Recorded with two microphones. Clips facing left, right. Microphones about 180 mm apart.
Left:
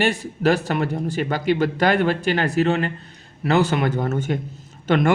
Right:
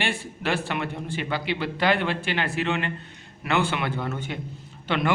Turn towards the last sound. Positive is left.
turn(degrees=45)  # may be behind; listen again after turning